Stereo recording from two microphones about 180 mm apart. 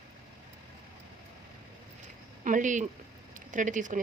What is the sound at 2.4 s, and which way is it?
Speech, 45° right (ahead or behind).